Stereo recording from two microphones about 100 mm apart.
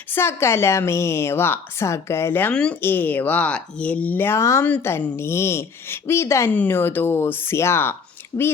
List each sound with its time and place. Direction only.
0.1 s a woman's voice: 25° left (ahead or behind)
2.5 s a woman's voice: 10° left (ahead or behind); by 6.5 s 30° left (ahead or behind)
6.5 s a woman's voice: 20° left (ahead or behind)